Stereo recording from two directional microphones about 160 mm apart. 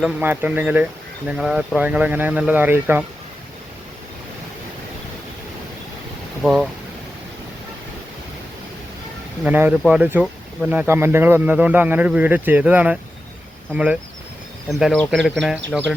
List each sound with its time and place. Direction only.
0.0 s speech: 10° right (ahead or behind)
6.4 s speech: 5° right (ahead or behind)
9.4 s speech: 10° right (ahead or behind)